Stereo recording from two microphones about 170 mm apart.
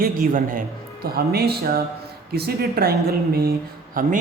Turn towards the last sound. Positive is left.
turn(degrees=-55)  # may be behind; listen again after turning